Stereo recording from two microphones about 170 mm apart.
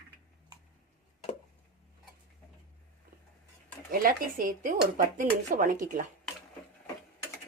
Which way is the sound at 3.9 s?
55° right (ahead or behind).